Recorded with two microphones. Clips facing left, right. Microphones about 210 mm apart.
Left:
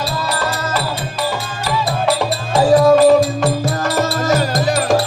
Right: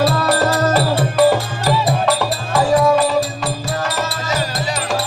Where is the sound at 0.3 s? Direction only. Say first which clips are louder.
Right 5 dB; 40° right (ahead or behind).